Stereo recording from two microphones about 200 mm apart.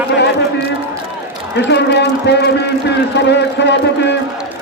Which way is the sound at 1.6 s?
60° left (ahead or behind).